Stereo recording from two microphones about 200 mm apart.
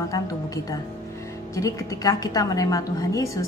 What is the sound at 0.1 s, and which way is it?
A woman's voice, 20° left (ahead or behind).